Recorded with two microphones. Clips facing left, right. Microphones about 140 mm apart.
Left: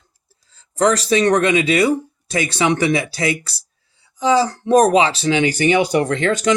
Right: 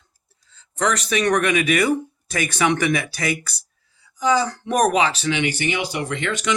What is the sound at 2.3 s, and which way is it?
Speech, 25° left (ahead or behind).